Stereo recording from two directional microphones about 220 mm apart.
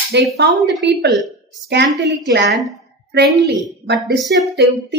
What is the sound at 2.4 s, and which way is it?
Speech, centre (ahead or behind).